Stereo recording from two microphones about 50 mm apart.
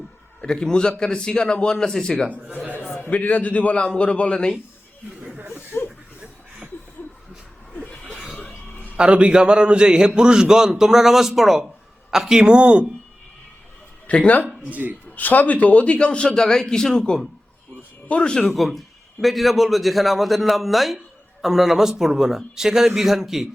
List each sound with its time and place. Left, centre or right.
0.4 s a man's voice: centre
2.3 s a man's voice: right
3.1 s a man's voice: left
5.3 s chuckle: right
9.0 s a man's voice: right
12.5 s a man's voice: right
14.1 s a man's voice: left
14.7 s a man's voice: right
15.1 s a man's voice: left
18.5 s a man's voice: centre